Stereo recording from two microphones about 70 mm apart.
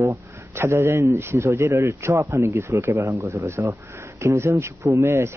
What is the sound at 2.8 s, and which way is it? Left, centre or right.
A man's voice, right.